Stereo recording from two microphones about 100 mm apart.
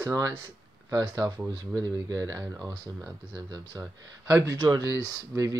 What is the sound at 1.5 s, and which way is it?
Speech, 40° right (ahead or behind).